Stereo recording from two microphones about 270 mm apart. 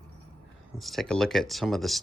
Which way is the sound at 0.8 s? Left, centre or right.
Centre.